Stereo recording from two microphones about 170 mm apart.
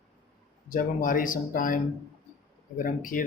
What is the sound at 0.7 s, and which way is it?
Speech, 55° left (ahead or behind).